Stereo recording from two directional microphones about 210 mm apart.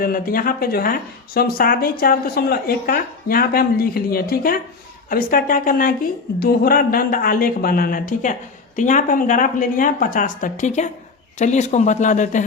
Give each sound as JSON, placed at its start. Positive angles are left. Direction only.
{"t": 0.0, "sound": "speech", "side_deg": 45}